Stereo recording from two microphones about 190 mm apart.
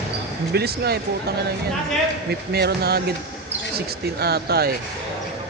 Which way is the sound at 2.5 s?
55° right (ahead or behind).